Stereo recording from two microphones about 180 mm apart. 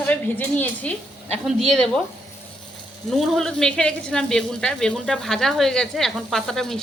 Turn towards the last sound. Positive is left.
turn(degrees=0)  # may be behind; listen again after turning